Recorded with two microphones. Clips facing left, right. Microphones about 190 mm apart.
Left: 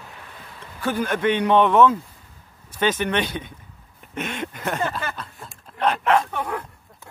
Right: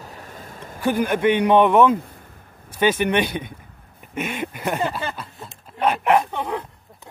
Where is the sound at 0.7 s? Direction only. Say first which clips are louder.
Right 3 dB; 10° right (ahead or behind).